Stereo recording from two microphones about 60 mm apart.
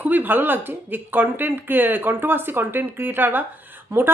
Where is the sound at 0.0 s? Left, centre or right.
Right.